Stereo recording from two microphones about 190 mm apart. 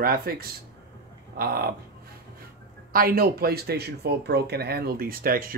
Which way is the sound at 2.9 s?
50° right (ahead or behind).